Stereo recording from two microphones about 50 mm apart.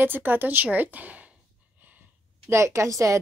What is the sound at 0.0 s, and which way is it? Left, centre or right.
A woman's voice, right.